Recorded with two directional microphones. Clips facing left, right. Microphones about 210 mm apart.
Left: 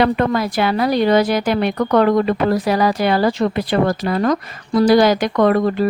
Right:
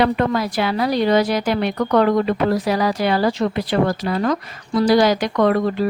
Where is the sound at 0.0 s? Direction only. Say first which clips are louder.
Left 2 dB; 55° left (ahead or behind).